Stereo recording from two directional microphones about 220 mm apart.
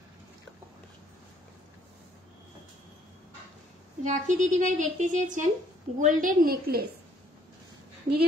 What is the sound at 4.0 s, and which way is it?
A woman's voice, 35° right (ahead or behind).